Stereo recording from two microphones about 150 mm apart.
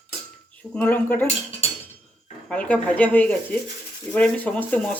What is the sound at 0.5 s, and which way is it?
Speech, 10° left (ahead or behind).